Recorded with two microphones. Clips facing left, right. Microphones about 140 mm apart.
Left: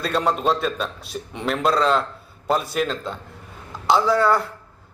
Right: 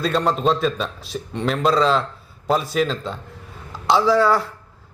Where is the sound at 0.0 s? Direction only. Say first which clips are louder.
Right 2 dB; centre (ahead or behind).